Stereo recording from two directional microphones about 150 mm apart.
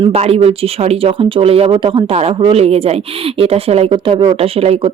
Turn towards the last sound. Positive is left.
turn(degrees=-40)  # may be behind; listen again after turning